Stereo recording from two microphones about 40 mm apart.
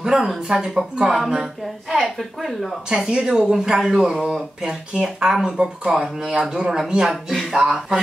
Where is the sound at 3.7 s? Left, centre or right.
Centre.